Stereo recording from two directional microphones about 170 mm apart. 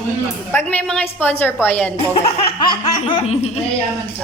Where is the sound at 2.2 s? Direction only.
30° left (ahead or behind).